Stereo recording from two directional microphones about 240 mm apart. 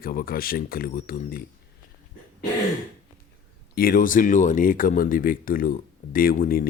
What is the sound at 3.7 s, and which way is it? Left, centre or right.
Speech, left.